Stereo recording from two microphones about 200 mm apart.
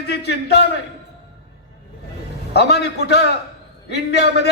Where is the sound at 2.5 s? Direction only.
55° left (ahead or behind).